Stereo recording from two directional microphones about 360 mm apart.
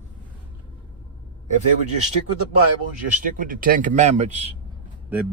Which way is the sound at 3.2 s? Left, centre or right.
Right.